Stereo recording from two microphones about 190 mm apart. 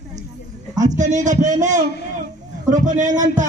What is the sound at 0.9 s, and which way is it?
A man's voice, 40° right (ahead or behind).